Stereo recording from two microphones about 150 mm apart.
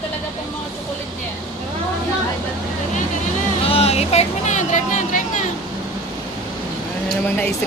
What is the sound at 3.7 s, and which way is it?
Speech, 40° left (ahead or behind).